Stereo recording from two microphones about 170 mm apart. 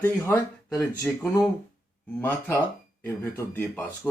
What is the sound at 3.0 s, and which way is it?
Speech, 15° left (ahead or behind).